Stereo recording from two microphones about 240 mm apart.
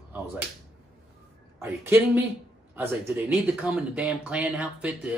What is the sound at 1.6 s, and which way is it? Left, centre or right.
Speech, centre.